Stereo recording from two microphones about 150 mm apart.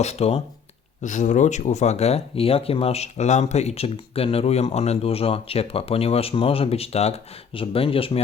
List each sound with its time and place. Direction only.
0.0 s speech: 45° left (ahead or behind)
1.0 s speech: 55° left (ahead or behind); by 8.2 s 40° left (ahead or behind)